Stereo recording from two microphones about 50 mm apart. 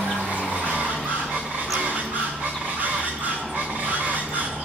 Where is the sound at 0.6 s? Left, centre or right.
Right.